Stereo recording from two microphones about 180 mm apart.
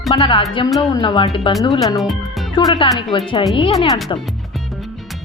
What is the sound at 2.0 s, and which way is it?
Music, centre (ahead or behind).